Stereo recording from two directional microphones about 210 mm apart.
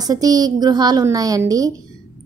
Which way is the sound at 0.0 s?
15° right (ahead or behind).